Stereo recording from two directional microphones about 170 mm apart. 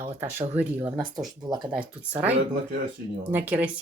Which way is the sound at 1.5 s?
25° right (ahead or behind).